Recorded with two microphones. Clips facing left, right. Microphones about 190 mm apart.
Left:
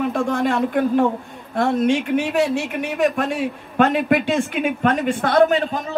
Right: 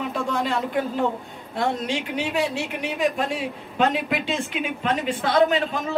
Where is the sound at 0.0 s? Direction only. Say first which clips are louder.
Left 6 dB; 55° left (ahead or behind).